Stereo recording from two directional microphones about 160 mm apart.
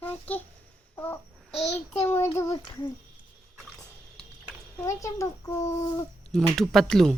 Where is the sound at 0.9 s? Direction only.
15° left (ahead or behind).